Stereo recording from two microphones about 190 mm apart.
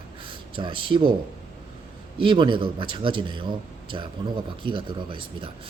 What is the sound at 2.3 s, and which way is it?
A man's voice, 25° right (ahead or behind).